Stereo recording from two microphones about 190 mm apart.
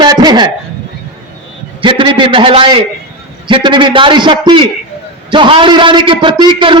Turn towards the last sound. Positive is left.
turn(degrees=-25)  # may be behind; listen again after turning